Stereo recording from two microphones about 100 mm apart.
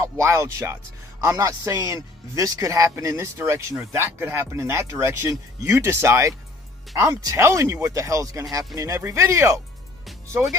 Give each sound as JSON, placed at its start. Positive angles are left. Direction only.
{"t": 0.2, "sound": "speech", "side_deg": -30}